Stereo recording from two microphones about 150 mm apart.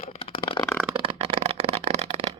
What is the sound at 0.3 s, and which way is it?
Shuffling cards, 35° left (ahead or behind).